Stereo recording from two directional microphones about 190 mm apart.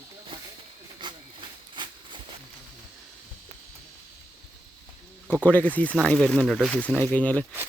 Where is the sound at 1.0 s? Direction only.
25° right (ahead or behind).